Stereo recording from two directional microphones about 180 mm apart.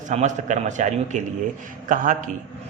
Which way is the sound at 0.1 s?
40° right (ahead or behind).